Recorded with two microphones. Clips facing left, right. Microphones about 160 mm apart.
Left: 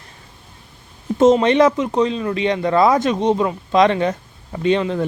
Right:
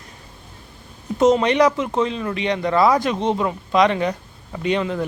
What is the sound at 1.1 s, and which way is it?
Speech, 25° left (ahead or behind).